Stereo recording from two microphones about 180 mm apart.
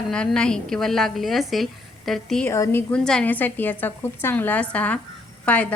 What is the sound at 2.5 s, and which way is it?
A woman's voice, 15° left (ahead or behind).